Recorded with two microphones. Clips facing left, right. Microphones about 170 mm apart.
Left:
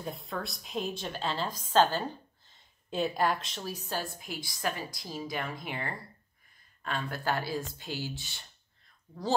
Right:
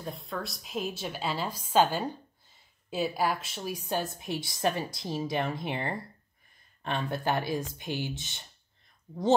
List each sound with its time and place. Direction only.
0.0 s a woman's voice: centre (ahead or behind); by 8.5 s 20° right (ahead or behind)